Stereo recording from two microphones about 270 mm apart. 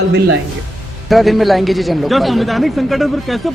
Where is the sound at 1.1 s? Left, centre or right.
Centre.